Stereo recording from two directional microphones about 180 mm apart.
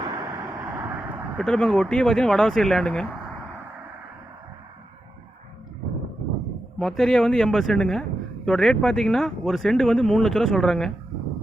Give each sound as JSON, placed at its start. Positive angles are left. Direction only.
{"t": 0.0, "sound": "vehicle", "side_deg": -25}
{"t": 0.6, "sound": "vehicle", "side_deg": -10}
{"t": 1.4, "sound": "speech", "side_deg": 5}
{"t": 6.7, "sound": "speech", "side_deg": 0}